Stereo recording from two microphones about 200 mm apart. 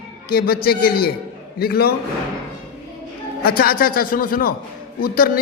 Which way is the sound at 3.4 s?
50° left (ahead or behind).